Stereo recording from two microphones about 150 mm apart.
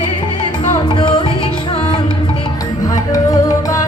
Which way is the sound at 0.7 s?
30° left (ahead or behind).